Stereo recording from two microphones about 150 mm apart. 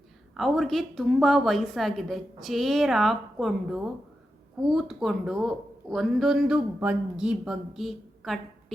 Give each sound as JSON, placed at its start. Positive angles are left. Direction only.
{"t": 0.3, "sound": "a woman's voice", "side_deg": 0}